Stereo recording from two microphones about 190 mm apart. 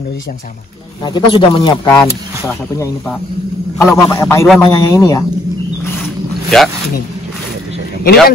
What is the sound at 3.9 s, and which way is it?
A man's voice, 15° left (ahead or behind).